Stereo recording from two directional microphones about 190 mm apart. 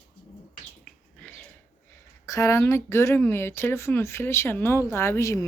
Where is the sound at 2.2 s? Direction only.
15° left (ahead or behind).